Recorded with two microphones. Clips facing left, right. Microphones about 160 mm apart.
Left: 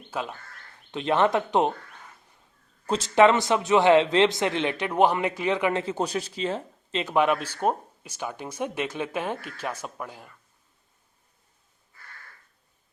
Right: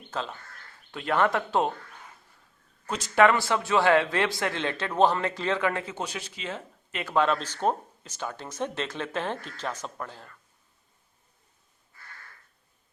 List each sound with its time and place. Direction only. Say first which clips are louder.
0.1 s speech: left 2 dB; 10° left (ahead or behind)
2.8 s speech: left 3 dB; 25° left (ahead or behind)
5.8 s speech: left 7 dB; 35° left (ahead or behind)
7.0 s speech: left 2 dB; 15° left (ahead or behind)